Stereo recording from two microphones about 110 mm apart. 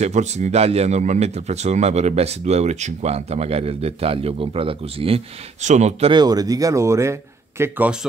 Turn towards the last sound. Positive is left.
turn(degrees=-20)  # may be behind; listen again after turning